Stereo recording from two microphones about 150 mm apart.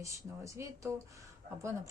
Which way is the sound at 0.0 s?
20° right (ahead or behind).